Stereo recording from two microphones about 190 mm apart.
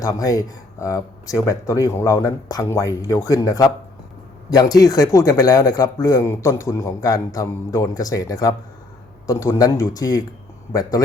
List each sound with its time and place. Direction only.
0.0 s speech: 20° left (ahead or behind)